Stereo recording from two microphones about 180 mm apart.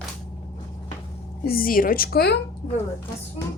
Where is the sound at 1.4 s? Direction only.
55° left (ahead or behind).